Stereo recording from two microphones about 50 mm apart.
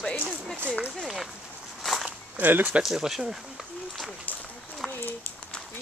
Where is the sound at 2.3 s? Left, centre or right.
Right.